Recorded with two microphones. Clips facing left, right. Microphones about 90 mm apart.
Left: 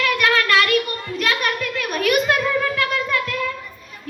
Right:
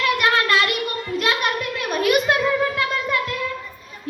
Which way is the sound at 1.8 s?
25° right (ahead or behind).